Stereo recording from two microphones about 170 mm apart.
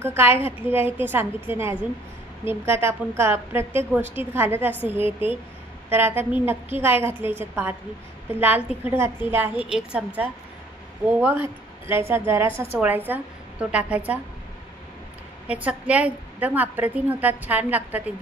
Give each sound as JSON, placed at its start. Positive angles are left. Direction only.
{"t": 0.0, "sound": "a woman's voice", "side_deg": -15}
{"t": 15.4, "sound": "a woman's voice", "side_deg": -10}